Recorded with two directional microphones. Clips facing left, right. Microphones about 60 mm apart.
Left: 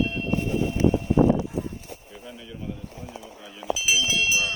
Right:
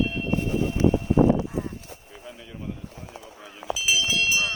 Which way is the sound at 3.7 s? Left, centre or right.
Centre.